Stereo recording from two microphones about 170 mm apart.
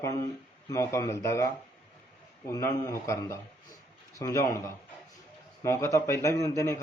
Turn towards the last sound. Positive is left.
turn(degrees=20)  # may be behind; listen again after turning